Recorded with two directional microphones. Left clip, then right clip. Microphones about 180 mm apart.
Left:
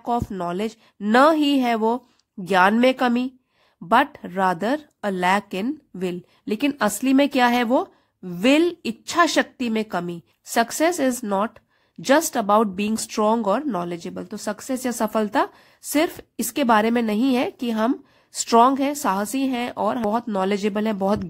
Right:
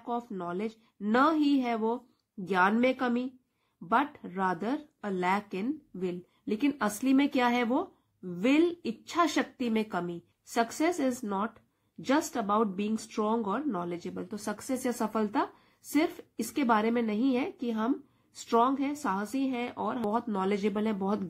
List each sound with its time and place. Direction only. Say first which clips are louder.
0.0 s speech: left 10 dB; 50° left (ahead or behind)